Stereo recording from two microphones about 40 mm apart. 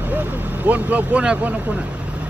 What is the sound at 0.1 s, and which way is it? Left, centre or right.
Speech, right.